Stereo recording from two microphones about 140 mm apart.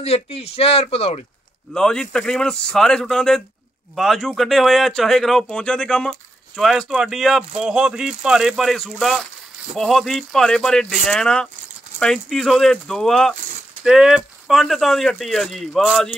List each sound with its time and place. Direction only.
0.0 s speech: 45° left (ahead or behind)
1.7 s speech: 5° left (ahead or behind)